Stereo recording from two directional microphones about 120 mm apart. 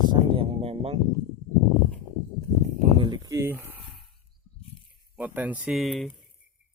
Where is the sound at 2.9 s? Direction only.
40° right (ahead or behind).